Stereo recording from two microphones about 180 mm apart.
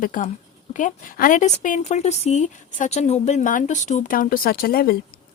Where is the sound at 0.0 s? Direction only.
45° left (ahead or behind).